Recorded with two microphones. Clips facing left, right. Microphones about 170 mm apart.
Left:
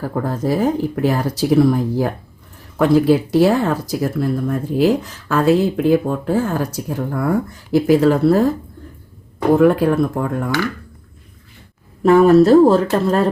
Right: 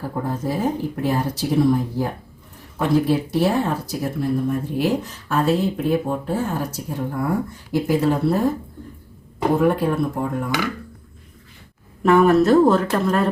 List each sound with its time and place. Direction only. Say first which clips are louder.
0.3 s speech: left 5 dB; 90° left
9.6 s speech: left 6 dB; 90° left
12.0 s speech: left 5 dB; 35° left (ahead or behind)